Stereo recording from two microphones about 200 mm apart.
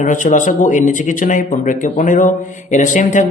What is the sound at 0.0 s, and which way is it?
Speech, 40° left (ahead or behind).